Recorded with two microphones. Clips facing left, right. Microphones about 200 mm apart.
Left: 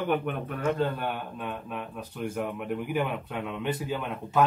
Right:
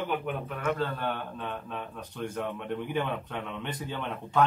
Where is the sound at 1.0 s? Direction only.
10° left (ahead or behind).